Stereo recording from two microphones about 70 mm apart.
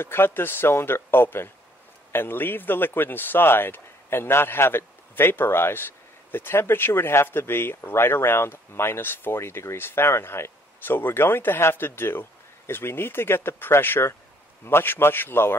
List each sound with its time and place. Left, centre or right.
0.0 s speech: left